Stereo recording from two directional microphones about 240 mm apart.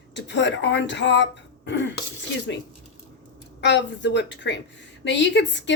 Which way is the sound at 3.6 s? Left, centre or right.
Left.